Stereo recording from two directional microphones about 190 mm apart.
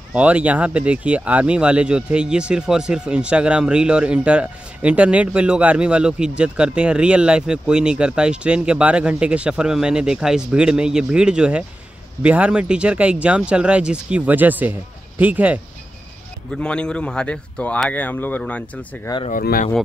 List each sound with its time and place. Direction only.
0.1 s speech: 5° right (ahead or behind)
16.5 s speech: 5° left (ahead or behind)
19.3 s speech: 45° left (ahead or behind)